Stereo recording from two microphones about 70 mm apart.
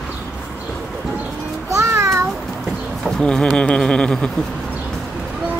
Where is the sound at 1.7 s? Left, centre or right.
Right.